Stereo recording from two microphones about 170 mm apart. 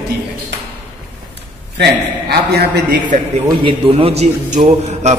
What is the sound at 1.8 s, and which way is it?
A man's voice, 70° right (ahead or behind).